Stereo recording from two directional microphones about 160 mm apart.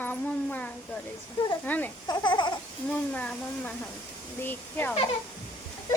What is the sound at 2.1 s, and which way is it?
Speech, 30° left (ahead or behind).